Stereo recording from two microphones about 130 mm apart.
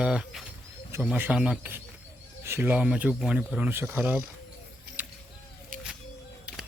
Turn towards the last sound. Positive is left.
turn(degrees=-15)  # may be behind; listen again after turning